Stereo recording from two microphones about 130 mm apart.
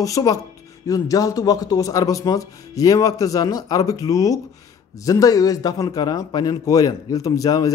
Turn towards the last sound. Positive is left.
turn(degrees=25)  # may be behind; listen again after turning